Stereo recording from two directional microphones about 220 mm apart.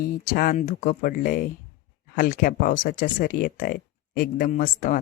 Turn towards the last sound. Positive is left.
turn(degrees=35)  # may be behind; listen again after turning